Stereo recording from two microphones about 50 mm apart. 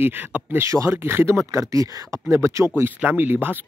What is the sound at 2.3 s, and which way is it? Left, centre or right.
Speech, right.